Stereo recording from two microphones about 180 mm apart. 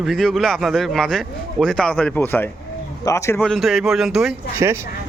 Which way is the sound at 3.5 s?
Centre (ahead or behind).